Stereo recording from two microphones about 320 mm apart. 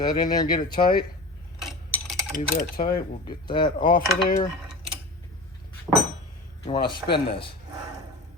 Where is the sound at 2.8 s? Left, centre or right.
Left.